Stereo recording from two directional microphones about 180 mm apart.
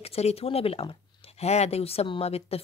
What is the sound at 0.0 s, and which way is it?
Speech, 35° left (ahead or behind).